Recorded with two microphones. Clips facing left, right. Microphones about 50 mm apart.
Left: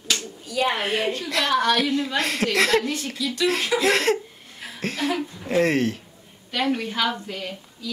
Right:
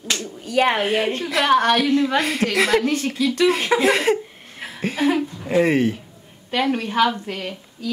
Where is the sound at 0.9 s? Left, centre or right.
Right.